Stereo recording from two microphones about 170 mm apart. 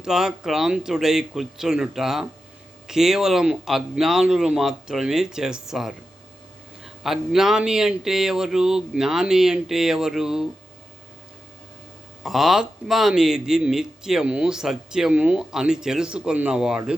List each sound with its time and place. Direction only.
0.0 s a man's voice: 5° right (ahead or behind)
12.2 s a man's voice: centre (ahead or behind)